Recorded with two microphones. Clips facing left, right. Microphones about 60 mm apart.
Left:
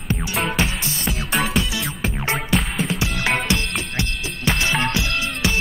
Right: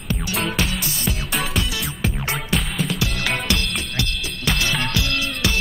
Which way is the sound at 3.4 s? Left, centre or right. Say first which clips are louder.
Left 1 dB; left.